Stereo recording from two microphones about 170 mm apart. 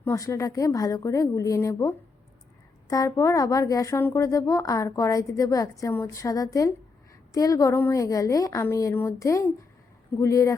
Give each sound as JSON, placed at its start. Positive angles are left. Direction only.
{"t": 0.0, "sound": "a woman's voice", "side_deg": 15}